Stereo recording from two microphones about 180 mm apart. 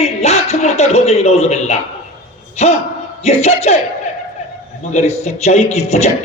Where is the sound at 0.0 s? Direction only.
35° left (ahead or behind).